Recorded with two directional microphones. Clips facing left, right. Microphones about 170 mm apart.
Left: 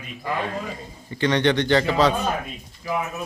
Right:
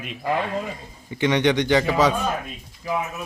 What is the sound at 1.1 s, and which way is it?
A man's voice, 15° right (ahead or behind).